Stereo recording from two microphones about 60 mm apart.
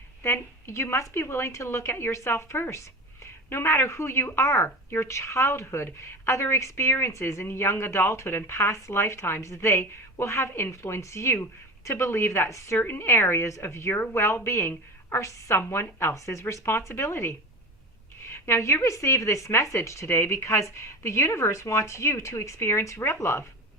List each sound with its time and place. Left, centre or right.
0.2 s a woman's voice: left
12.8 s speech: left
13.2 s a woman's voice: left
20.1 s speech: left